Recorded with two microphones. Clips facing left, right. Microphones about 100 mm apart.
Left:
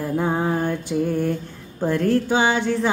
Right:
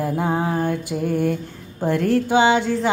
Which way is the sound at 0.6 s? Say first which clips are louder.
Even; 55° right (ahead or behind).